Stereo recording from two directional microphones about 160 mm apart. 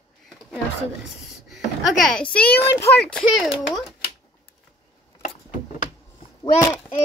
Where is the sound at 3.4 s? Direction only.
5° right (ahead or behind).